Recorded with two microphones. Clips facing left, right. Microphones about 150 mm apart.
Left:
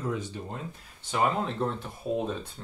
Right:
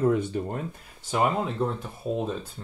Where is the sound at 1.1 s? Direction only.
Centre (ahead or behind).